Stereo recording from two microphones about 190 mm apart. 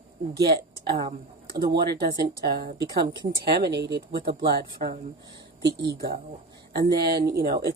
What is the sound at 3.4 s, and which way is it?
Speech, 60° right (ahead or behind).